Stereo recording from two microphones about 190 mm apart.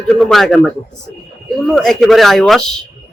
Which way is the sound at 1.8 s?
Centre (ahead or behind).